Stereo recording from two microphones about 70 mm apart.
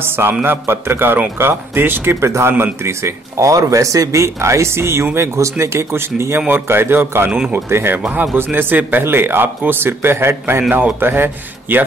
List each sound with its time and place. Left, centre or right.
0.0 s speech: right
10.7 s speech: right